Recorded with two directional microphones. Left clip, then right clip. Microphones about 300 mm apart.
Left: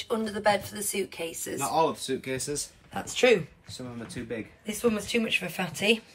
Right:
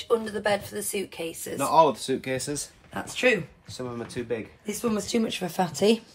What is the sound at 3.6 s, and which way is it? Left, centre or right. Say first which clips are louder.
Speech: right 5 dB; centre.